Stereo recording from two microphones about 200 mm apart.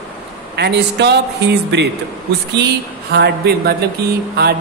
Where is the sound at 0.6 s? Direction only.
60° right (ahead or behind).